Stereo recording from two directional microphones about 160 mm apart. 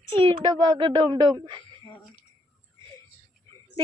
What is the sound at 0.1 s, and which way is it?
A child's voice, 30° right (ahead or behind).